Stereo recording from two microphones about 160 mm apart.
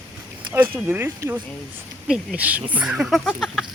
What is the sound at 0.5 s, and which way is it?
Speech, 15° right (ahead or behind).